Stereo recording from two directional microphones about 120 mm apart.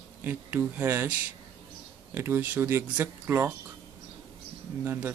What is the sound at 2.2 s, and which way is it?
Speech, 20° right (ahead or behind).